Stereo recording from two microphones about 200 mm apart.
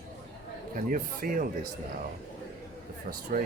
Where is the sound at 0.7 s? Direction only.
45° right (ahead or behind).